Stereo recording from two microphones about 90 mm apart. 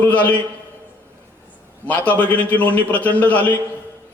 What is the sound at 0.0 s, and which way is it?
Speech, 15° left (ahead or behind).